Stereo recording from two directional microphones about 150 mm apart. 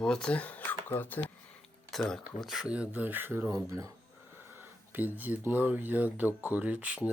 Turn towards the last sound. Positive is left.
turn(degrees=-10)  # may be behind; listen again after turning